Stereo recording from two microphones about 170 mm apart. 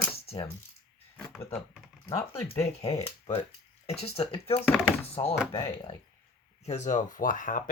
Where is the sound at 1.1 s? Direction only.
5° left (ahead or behind).